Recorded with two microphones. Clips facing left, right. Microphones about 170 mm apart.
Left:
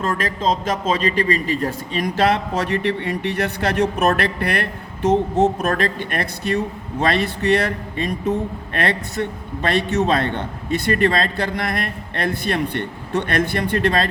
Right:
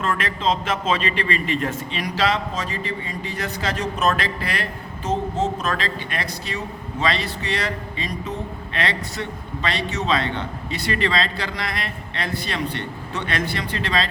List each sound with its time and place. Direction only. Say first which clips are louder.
0.0 s a man's voice: left 2 dB; 40° left (ahead or behind); by 14.1 s 55° left (ahead or behind)